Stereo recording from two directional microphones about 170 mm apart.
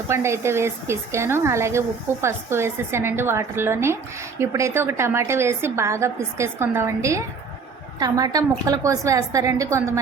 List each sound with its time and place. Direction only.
0.1 s a woman's voice: 15° right (ahead or behind)